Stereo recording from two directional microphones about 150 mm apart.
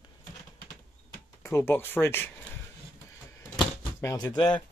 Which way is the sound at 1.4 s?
20° left (ahead or behind).